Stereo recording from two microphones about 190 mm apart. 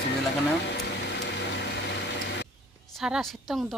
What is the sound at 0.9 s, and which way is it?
Vehicle, 65° left (ahead or behind).